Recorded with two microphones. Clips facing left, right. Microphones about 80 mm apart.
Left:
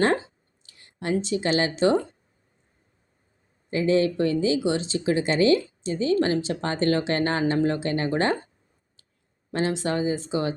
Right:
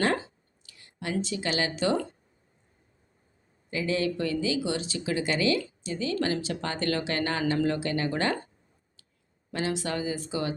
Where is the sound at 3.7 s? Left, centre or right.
Left.